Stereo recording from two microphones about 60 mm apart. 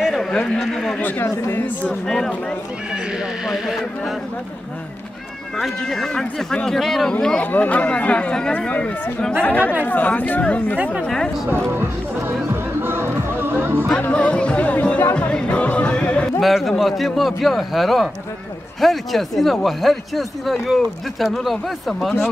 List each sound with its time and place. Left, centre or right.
0.0 s a sound: centre
0.9 s speech: left
2.0 s speech: centre
2.9 s speech: centre
5.6 s speech: centre
7.4 s speech: left
11.7 s music: right
14.1 s speech: centre
16.3 s speech: centre